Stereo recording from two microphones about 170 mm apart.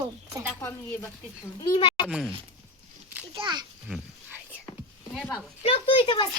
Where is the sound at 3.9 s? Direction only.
10° right (ahead or behind).